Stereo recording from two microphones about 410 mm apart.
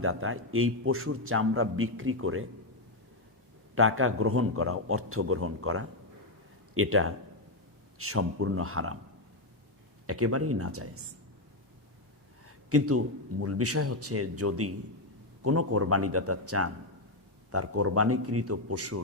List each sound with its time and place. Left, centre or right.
0.0 s a man's voice: right
3.8 s a man's voice: right
10.1 s a man's voice: right
12.7 s a man's voice: right